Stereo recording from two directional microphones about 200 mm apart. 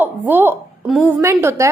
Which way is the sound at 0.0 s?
10° right (ahead or behind).